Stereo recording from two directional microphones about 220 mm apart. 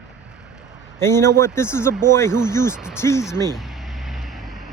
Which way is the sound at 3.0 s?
10° left (ahead or behind).